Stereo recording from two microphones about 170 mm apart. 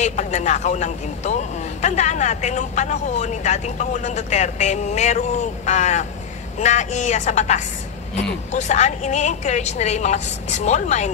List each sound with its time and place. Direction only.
0.0 s a man's voice: 45° left (ahead or behind)